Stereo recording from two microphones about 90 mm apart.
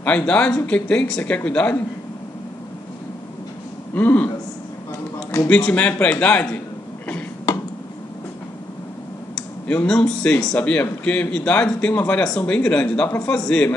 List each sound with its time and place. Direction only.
0.0 s speech: 15° left (ahead or behind)
3.9 s speech: 20° left (ahead or behind)
5.5 s speech: 15° left (ahead or behind)
9.7 s speech: 10° left (ahead or behind)